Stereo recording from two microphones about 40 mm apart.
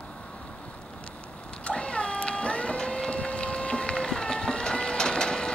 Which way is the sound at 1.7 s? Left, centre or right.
Left.